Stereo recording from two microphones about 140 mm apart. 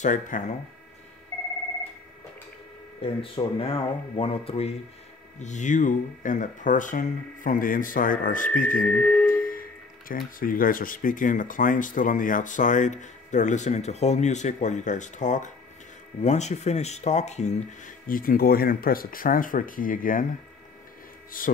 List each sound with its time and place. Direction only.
0.0 s speech: 65° left (ahead or behind)
3.0 s speech: 40° left (ahead or behind)
5.4 s speech: 60° left (ahead or behind); by 8.8 s 80° left
8.8 s speech: 10° left (ahead or behind)
9.3 s speech: 90° left; by 17.9 s 55° left (ahead or behind)
18.0 s speech: 90° left
21.4 s speech: 85° left